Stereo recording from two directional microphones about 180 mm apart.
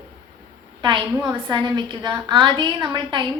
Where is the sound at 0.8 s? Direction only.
25° right (ahead or behind).